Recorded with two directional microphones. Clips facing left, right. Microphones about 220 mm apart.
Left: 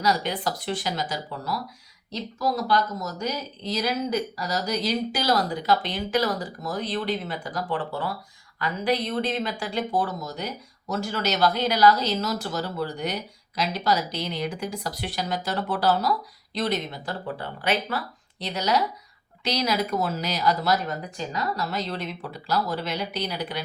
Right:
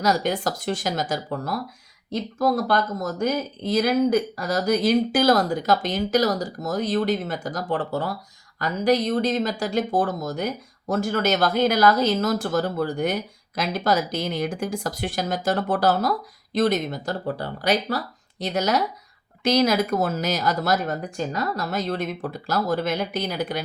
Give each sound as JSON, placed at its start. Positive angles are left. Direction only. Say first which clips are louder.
{"t": 0.0, "sound": "speech", "louder": "right 3 dB", "side_deg": -45}